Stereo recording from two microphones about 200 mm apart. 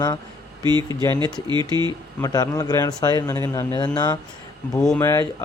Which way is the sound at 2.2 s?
20° left (ahead or behind).